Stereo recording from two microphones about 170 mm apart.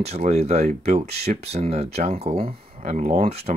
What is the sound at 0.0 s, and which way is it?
Speech, 40° right (ahead or behind).